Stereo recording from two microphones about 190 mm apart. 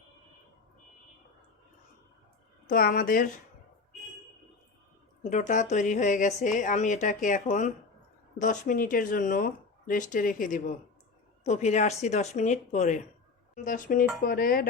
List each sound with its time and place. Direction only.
2.6 s speech: 50° left (ahead or behind)
5.2 s a woman's voice: 40° left (ahead or behind)